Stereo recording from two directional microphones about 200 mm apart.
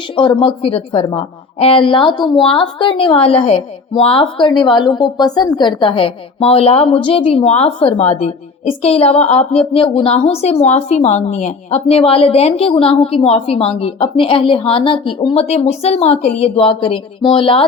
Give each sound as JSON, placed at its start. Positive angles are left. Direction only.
{"t": 0.2, "sound": "a woman's voice", "side_deg": 25}